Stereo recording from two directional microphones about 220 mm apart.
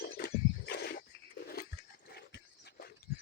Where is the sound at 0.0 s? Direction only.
45° left (ahead or behind).